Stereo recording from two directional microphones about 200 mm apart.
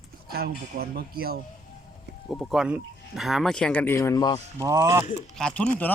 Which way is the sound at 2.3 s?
Centre (ahead or behind).